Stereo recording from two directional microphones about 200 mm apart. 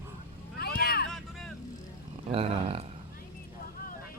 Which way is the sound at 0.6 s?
50° left (ahead or behind).